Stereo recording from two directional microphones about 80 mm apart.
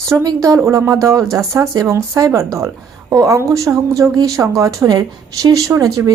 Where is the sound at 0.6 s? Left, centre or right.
Right.